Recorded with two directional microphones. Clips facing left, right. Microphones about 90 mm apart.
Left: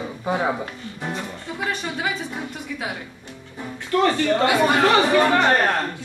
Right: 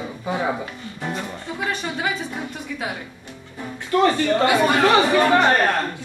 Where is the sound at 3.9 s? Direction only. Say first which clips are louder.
Right 1 dB; 20° right (ahead or behind).